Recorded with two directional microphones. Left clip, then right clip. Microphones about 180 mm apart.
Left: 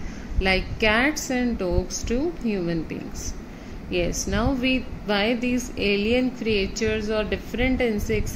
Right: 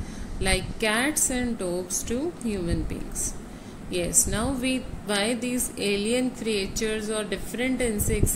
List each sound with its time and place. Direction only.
0.4 s a woman's voice: 35° left (ahead or behind)